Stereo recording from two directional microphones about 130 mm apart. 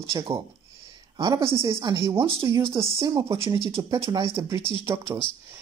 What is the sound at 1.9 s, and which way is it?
Speech, 20° right (ahead or behind).